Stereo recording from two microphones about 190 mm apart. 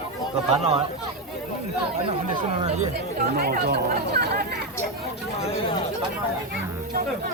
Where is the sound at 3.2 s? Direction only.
50° right (ahead or behind).